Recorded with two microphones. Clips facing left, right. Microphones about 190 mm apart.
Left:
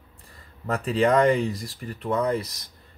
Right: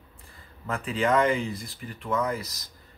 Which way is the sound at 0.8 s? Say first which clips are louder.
Left 4 dB; 35° left (ahead or behind).